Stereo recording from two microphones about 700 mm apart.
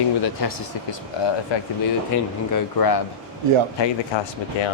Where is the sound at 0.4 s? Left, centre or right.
Left.